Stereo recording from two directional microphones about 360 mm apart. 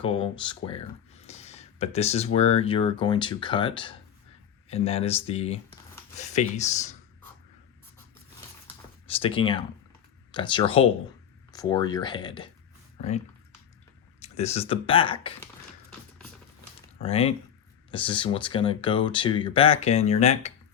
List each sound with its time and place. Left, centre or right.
0.0 s speech: centre
9.0 s speech: centre
17.0 s speech: centre